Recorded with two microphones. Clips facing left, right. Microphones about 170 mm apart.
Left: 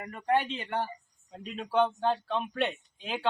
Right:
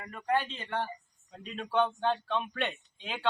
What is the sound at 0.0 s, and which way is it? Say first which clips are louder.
Speech: left 3 dB; 20° left (ahead or behind).